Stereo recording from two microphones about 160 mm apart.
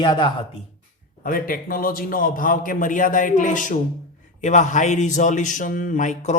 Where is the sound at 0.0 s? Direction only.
30° left (ahead or behind).